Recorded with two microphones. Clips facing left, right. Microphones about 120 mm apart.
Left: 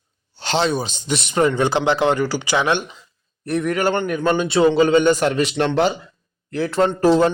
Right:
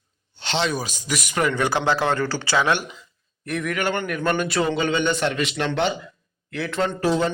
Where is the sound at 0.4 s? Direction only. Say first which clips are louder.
Left 5 dB; 40° left (ahead or behind).